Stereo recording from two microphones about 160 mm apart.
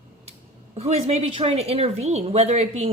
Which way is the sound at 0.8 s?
40° right (ahead or behind).